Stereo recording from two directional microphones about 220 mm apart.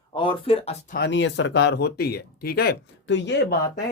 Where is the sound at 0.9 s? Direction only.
55° left (ahead or behind).